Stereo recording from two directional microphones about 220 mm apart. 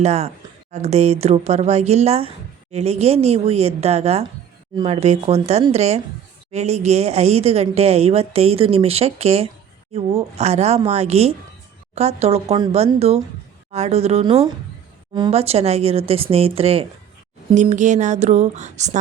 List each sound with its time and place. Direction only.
0.0 s speech: 30° right (ahead or behind)